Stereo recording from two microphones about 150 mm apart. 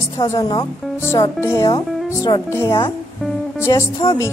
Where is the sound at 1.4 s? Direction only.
15° left (ahead or behind).